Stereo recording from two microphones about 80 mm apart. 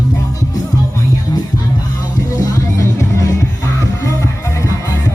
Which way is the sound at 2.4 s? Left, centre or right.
Left.